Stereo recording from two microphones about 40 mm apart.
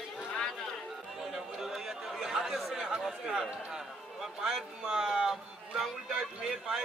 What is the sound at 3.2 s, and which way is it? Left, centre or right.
A man's voice, centre.